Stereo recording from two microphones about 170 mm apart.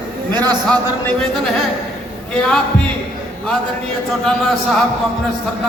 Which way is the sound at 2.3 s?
5° left (ahead or behind).